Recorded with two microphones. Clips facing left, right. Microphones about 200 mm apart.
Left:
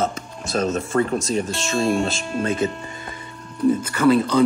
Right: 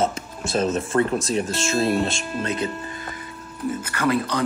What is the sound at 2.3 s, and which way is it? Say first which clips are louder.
Speech: left 5 dB; 25° left (ahead or behind).